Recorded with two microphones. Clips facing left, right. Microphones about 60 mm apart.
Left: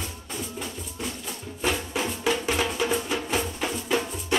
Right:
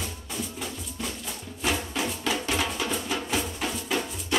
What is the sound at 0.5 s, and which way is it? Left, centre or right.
Music, centre.